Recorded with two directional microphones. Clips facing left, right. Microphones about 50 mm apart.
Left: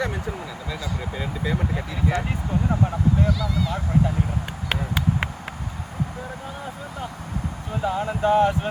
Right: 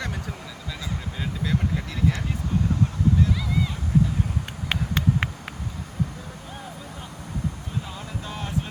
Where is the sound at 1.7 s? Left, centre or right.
Left.